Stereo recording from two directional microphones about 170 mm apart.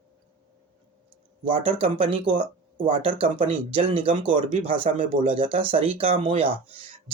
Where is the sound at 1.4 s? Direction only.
30° right (ahead or behind).